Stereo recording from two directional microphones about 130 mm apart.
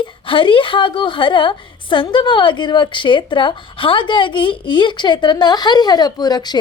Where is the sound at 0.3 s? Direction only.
40° left (ahead or behind).